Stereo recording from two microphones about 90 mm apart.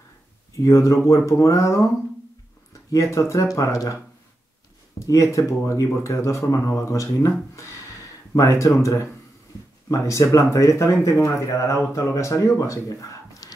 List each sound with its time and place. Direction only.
0.7 s speech: 35° left (ahead or behind)
2.9 s speech: 35° left (ahead or behind)